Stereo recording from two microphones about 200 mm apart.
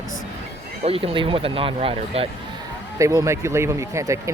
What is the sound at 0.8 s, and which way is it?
Speech, 30° right (ahead or behind).